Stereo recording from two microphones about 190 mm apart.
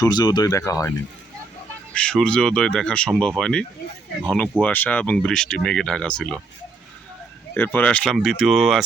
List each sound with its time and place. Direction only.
0.0 s speech: 20° left (ahead or behind)
1.9 s speech: 5° left (ahead or behind)
7.5 s speech: 10° left (ahead or behind)